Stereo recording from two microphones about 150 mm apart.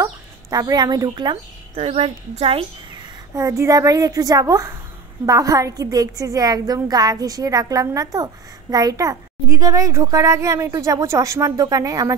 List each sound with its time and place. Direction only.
0.0 s speech: 25° right (ahead or behind)
1.9 s a woman's voice: 45° right (ahead or behind)
3.3 s a woman's voice: 20° right (ahead or behind)